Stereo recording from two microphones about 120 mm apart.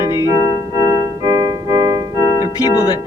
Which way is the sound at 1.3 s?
25° right (ahead or behind).